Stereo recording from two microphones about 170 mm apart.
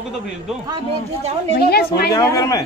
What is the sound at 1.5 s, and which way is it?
Speech, 65° left (ahead or behind).